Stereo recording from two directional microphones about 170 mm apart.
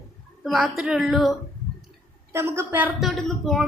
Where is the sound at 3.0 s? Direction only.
Centre (ahead or behind).